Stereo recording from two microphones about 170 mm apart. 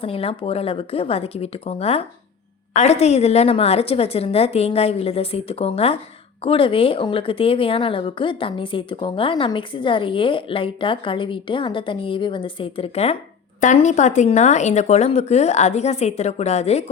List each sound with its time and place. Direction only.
0.0 s speech: 35° left (ahead or behind)